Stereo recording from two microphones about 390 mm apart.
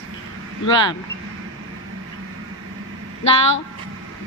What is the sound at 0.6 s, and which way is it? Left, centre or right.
Speech, centre.